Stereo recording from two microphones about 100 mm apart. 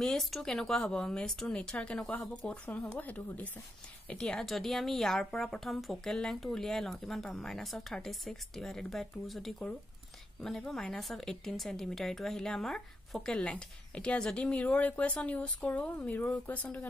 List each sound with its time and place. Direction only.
0.0 s a woman's voice: 5° left (ahead or behind)